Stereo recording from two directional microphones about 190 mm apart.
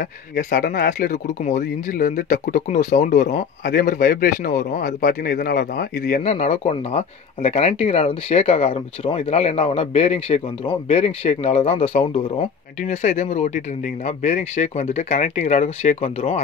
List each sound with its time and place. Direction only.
0.0 s speech: 45° left (ahead or behind)